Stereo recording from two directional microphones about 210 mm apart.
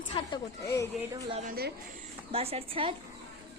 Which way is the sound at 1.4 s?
45° right (ahead or behind).